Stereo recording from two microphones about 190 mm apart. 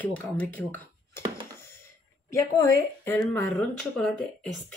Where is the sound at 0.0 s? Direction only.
10° left (ahead or behind).